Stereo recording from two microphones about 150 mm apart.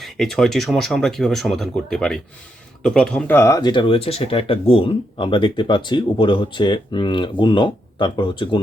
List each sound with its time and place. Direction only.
0.0 s speech: centre (ahead or behind); by 8.5 s 30° left (ahead or behind)